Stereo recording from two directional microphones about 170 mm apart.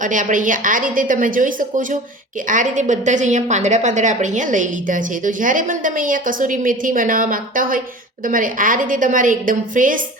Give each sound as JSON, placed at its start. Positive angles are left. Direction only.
{"t": 0.0, "sound": "a woman's voice", "side_deg": -50}